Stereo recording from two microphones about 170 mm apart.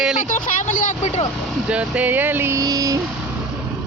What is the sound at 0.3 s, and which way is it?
Speech, 50° left (ahead or behind).